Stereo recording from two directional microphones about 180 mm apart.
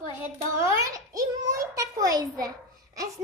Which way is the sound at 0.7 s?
20° right (ahead or behind).